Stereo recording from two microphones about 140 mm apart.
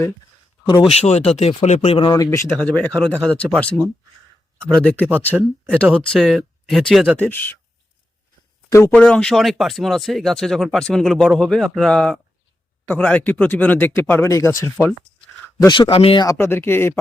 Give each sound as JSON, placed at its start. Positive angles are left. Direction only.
{"t": 0.9, "sound": "speech", "side_deg": 50}
{"t": 2.0, "sound": "speech", "side_deg": 25}
{"t": 2.6, "sound": "speech", "side_deg": 10}
{"t": 7.2, "sound": "speech", "side_deg": 15}
{"t": 8.7, "sound": "speech", "side_deg": 20}
{"t": 9.0, "sound": "speech", "side_deg": 5}
{"t": 15.6, "sound": "speech", "side_deg": 35}
{"t": 16.2, "sound": "speech", "side_deg": 20}